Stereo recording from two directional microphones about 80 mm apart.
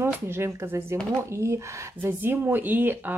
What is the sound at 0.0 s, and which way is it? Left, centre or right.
Speech, right.